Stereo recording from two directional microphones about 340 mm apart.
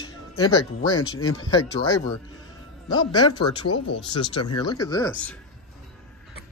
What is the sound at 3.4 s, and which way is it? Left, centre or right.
Speech, left.